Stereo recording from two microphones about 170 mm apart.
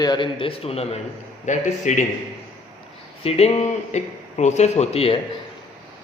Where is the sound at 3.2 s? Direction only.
40° left (ahead or behind).